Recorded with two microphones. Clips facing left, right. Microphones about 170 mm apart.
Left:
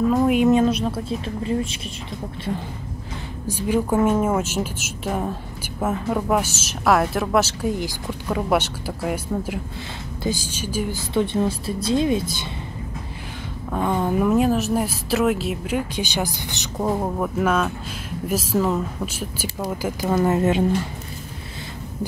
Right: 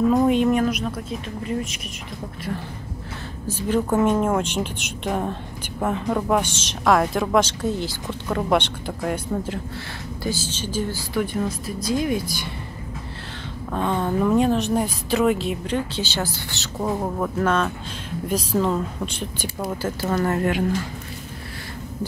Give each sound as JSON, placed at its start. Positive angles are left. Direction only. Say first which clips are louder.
{"t": 0.1, "sound": "speech", "louder": "right 1 dB", "side_deg": 0}
{"t": 0.4, "sound": "a woman's voice", "louder": "left 3 dB", "side_deg": 25}
{"t": 3.4, "sound": "speech", "louder": "left 1 dB", "side_deg": 10}
{"t": 11.0, "sound": "a woman's voice", "louder": "left 3 dB", "side_deg": 25}
{"t": 13.7, "sound": "speech", "louder": "left 1 dB", "side_deg": 10}